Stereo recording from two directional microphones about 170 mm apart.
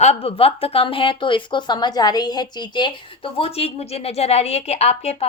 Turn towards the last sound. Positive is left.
turn(degrees=40)  # may be behind; listen again after turning